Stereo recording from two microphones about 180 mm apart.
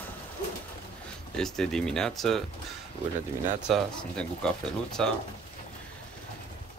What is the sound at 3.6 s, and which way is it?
Speech, centre (ahead or behind).